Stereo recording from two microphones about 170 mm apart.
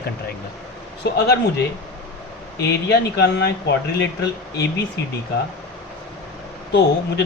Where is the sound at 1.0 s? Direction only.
75° left (ahead or behind).